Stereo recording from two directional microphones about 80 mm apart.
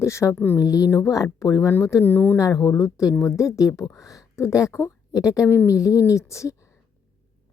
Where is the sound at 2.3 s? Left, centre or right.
Left.